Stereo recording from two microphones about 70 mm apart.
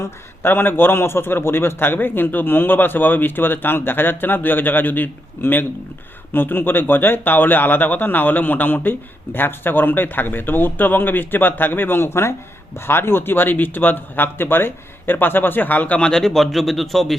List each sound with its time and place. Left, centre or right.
0.4 s speech: left; by 17.2 s centre